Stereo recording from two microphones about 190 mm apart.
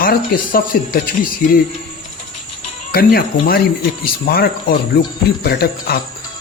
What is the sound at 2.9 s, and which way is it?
Speech, 50° left (ahead or behind).